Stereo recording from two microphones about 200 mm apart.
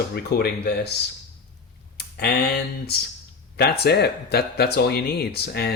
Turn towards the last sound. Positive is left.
turn(degrees=55)  # may be behind; listen again after turning